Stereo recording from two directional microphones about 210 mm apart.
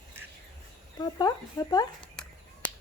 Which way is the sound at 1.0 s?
20° left (ahead or behind).